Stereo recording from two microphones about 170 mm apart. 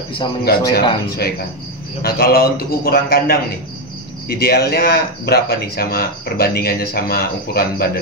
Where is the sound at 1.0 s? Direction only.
65° left (ahead or behind).